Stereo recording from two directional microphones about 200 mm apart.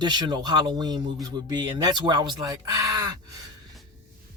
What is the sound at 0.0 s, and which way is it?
Speech, 20° right (ahead or behind).